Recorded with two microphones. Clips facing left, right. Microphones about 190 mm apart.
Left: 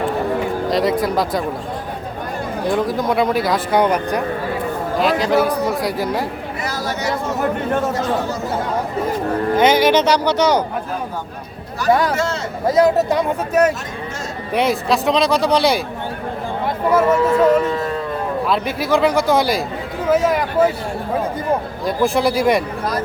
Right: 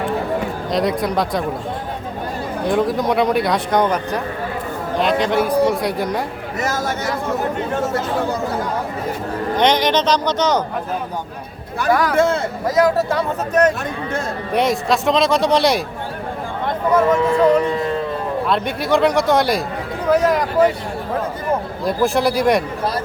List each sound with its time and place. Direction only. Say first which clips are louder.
0.7 s speech: even; centre (ahead or behind)
2.6 s speech: right 1 dB; centre (ahead or behind)
6.6 s chatter: right 3 dB; 45° right (ahead or behind)
9.6 s speech: left 2 dB; 5° left (ahead or behind)
11.9 s a man's voice: left 2 dB; 25° left (ahead or behind)
12.1 s speech: right 5 dB; 55° right (ahead or behind)
12.6 s speech: left 3 dB; 25° left (ahead or behind); by 15.8 s centre (ahead or behind)
16.9 s speech: left 1 dB; 5° left (ahead or behind)
21.8 s speech: even; centre (ahead or behind)